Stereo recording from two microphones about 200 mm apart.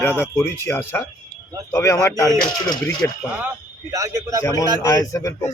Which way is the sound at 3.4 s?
15° right (ahead or behind).